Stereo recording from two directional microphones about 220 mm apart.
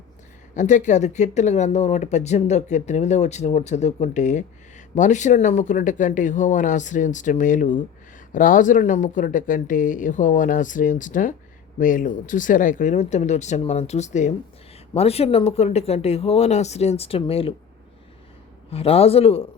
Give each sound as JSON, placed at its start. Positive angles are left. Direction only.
{"t": 0.5, "sound": "speech", "side_deg": 35}
{"t": 18.7, "sound": "speech", "side_deg": 25}